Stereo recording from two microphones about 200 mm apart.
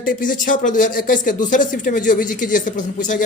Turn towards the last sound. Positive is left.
turn(degrees=40)  # may be behind; listen again after turning